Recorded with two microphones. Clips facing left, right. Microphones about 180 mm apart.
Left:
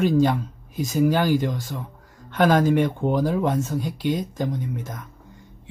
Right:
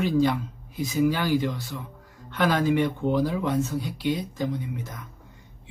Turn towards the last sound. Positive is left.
turn(degrees=45)  # may be behind; listen again after turning